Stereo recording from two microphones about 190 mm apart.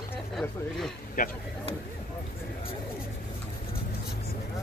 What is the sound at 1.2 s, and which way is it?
Speech, 50° left (ahead or behind).